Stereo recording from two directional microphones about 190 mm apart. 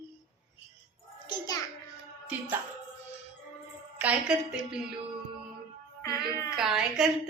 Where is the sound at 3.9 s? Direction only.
5° right (ahead or behind).